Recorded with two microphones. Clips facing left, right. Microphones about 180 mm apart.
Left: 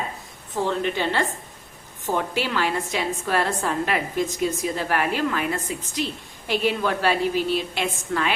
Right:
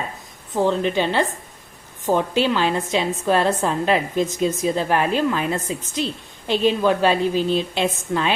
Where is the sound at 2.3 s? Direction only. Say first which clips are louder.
Right 5 dB; 20° right (ahead or behind).